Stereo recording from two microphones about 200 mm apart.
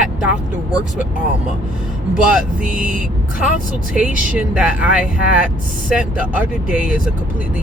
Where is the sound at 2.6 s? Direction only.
40° right (ahead or behind).